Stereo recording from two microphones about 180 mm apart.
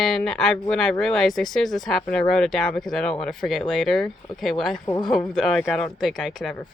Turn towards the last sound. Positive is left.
turn(degrees=0)  # may be behind; listen again after turning